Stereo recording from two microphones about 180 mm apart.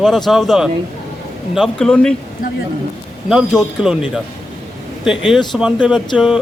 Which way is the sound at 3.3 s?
Centre (ahead or behind).